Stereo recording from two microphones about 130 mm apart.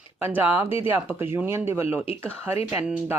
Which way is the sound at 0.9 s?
15° right (ahead or behind).